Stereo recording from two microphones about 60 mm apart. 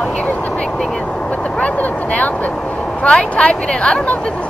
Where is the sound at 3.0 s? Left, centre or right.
Centre.